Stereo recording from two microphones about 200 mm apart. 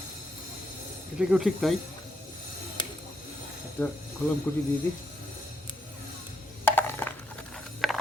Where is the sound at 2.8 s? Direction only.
25° left (ahead or behind).